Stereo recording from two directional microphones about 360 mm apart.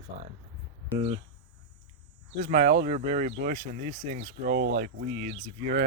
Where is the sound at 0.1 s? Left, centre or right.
Right.